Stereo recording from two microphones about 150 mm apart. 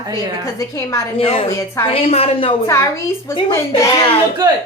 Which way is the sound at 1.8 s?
40° left (ahead or behind).